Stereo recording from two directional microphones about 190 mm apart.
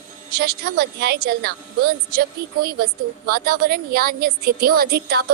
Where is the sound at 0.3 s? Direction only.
60° right (ahead or behind).